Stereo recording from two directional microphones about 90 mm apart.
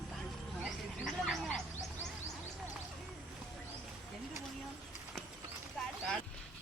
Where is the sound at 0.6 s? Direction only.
Centre (ahead or behind).